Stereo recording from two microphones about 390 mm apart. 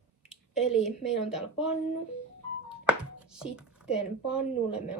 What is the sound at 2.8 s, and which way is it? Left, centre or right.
Speech, centre.